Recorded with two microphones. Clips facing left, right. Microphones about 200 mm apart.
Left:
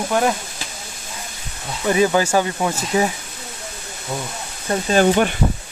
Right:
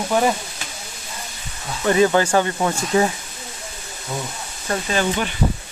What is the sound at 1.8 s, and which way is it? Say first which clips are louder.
Speech: right 1 dB; 10° left (ahead or behind).